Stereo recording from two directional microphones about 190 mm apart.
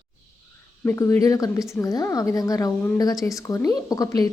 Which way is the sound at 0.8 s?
10° left (ahead or behind).